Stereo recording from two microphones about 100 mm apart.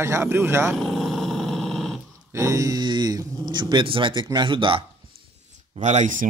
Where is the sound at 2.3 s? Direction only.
30° right (ahead or behind).